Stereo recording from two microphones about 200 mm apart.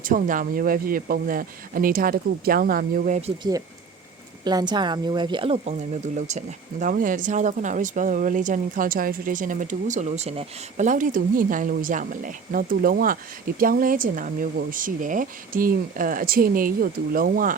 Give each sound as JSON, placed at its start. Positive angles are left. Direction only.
{"t": 0.0, "sound": "speech", "side_deg": -40}
{"t": 4.4, "sound": "speech", "side_deg": -20}